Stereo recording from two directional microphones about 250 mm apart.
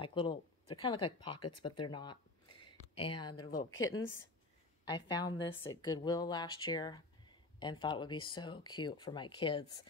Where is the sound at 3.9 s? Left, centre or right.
Left.